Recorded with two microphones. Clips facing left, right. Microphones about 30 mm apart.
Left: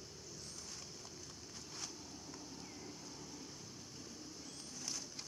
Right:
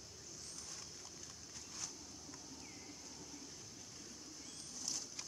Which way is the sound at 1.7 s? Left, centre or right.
Left.